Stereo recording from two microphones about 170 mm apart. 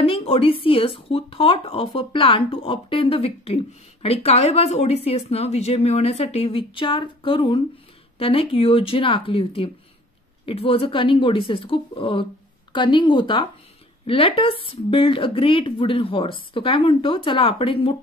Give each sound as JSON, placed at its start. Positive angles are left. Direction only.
{"t": 0.0, "sound": "speech", "side_deg": 35}